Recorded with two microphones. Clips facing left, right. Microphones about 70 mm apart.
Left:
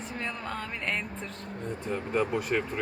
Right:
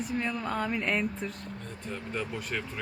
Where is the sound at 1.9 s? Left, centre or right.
Left.